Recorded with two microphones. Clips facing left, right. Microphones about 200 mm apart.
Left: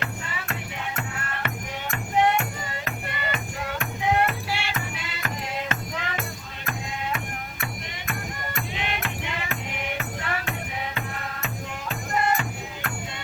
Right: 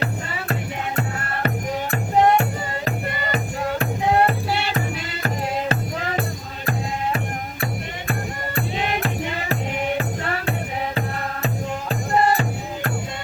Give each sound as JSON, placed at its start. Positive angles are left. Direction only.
{"t": 0.9, "sound": "music", "side_deg": -35}
{"t": 8.5, "sound": "music", "side_deg": -35}
{"t": 11.4, "sound": "music", "side_deg": -35}